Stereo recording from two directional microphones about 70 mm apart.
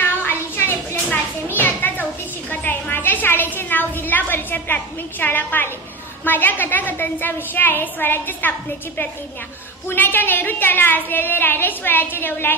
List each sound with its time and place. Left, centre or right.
0.0 s a sound: left
1.6 s children playing: left
2.5 s a woman's voice: left